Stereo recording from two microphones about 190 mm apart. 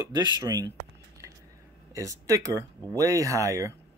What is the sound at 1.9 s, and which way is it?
Speech, 15° right (ahead or behind).